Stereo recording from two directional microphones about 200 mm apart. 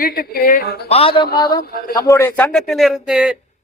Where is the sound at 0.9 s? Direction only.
30° left (ahead or behind).